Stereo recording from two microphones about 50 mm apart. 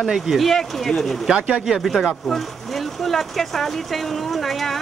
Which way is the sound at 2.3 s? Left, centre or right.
Centre.